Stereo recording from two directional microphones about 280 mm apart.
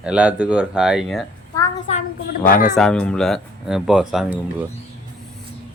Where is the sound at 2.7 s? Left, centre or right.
Centre.